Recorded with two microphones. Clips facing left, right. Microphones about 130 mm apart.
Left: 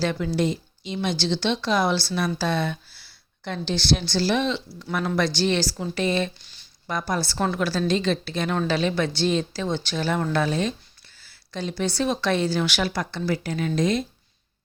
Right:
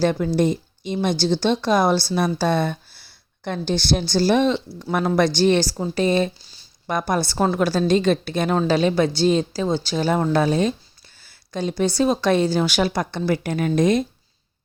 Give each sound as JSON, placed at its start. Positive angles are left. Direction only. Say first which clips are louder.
{"t": 0.0, "sound": "a woman's voice", "louder": "right 5 dB", "side_deg": -45}
{"t": 11.2, "sound": "a sound", "louder": "right 5 dB", "side_deg": -45}
{"t": 11.9, "sound": "speech", "louder": "right 5 dB", "side_deg": -40}